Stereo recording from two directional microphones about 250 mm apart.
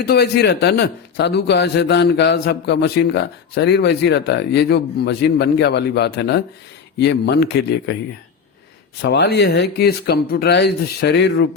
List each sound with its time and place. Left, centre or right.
0.0 s a man's voice: left
9.0 s a man's voice: left